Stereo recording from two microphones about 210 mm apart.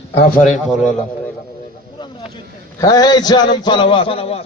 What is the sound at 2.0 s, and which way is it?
A man's voice, 20° left (ahead or behind).